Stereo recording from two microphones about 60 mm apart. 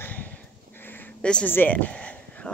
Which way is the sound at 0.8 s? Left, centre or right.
Left.